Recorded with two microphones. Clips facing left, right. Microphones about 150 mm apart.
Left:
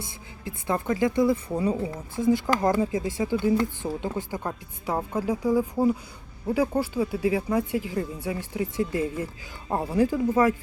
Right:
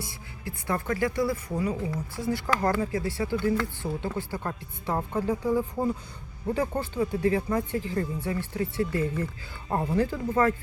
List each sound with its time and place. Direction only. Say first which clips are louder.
0.0 s a woman's voice: left 1 dB; 20° left (ahead or behind)